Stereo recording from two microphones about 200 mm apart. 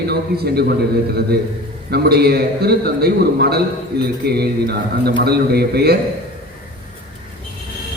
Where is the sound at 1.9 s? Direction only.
50° right (ahead or behind).